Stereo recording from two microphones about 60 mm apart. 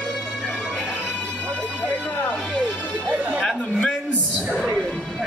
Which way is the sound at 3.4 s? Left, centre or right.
Centre.